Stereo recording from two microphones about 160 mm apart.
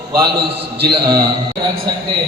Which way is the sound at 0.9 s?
25° right (ahead or behind).